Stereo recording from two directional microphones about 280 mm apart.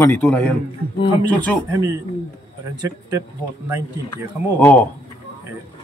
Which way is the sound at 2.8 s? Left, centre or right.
Centre.